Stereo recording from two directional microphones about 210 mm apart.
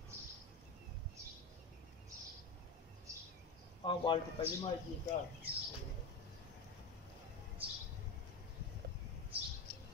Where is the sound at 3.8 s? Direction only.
20° left (ahead or behind).